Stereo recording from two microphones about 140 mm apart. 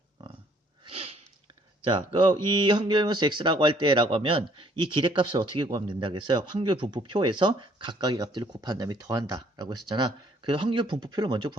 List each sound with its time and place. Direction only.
0.9 s sniff: 45° right (ahead or behind)
1.8 s speech: 35° right (ahead or behind)